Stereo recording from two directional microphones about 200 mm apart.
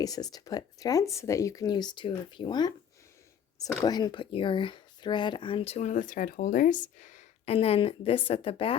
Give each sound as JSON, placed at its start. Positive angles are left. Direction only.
{"t": 0.0, "sound": "speech", "side_deg": 20}
{"t": 3.8, "sound": "speech", "side_deg": 20}